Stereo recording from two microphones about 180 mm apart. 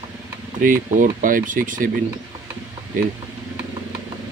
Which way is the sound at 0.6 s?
45° right (ahead or behind).